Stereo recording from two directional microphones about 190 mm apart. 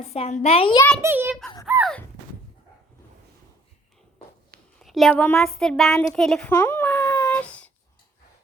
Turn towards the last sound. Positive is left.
turn(degrees=5)  # may be behind; listen again after turning